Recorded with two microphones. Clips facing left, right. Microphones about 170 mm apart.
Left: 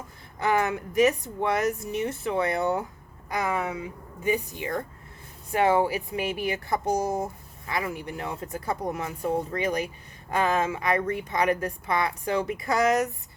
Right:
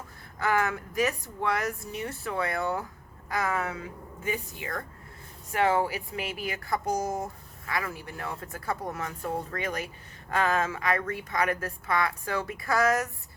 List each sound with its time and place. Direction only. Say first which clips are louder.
0.3 s speech: left 2 dB; 20° left (ahead or behind)